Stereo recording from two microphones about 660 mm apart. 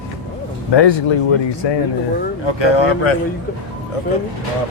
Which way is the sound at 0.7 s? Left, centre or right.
Left.